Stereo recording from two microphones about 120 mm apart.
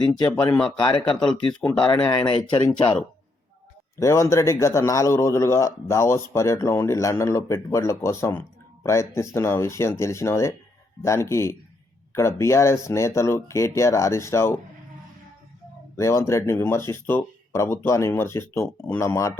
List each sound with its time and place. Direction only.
0.8 s speech: 40° left (ahead or behind)
4.0 s speech: 25° left (ahead or behind)
16.0 s speech: 25° left (ahead or behind)